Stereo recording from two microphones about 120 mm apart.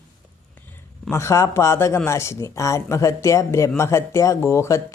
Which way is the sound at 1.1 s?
25° left (ahead or behind).